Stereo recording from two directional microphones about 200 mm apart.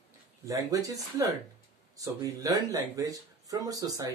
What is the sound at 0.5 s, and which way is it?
Speech, 15° right (ahead or behind).